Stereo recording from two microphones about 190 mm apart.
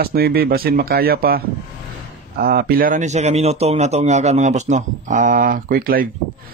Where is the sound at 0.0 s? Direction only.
55° right (ahead or behind).